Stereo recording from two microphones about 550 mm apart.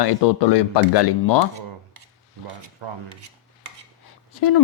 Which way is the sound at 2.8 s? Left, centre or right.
Right.